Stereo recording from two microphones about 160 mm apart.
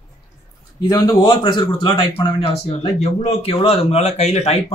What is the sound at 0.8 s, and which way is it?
A man's voice, 25° left (ahead or behind).